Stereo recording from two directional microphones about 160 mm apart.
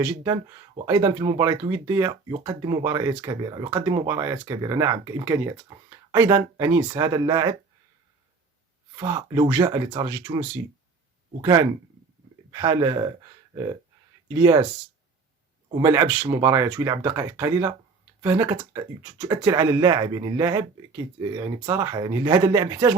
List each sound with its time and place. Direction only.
0.0 s speech: 25° right (ahead or behind)
9.0 s speech: 25° right (ahead or behind)
14.3 s speech: 25° right (ahead or behind)
15.8 s speech: 20° right (ahead or behind)